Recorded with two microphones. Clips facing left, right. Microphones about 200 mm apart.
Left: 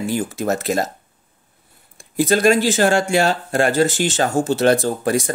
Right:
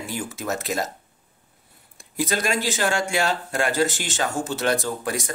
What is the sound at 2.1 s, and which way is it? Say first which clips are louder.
Speech: left 9 dB; 30° left (ahead or behind).